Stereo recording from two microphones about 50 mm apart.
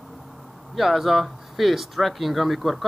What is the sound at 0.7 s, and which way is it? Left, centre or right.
Speech, centre.